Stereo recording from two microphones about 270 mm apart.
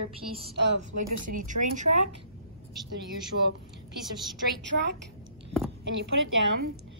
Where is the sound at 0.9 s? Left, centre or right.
Right.